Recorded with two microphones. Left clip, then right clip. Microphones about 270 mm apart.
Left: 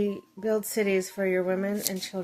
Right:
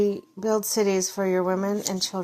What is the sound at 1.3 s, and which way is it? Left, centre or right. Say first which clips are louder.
Speech: right 3 dB; centre.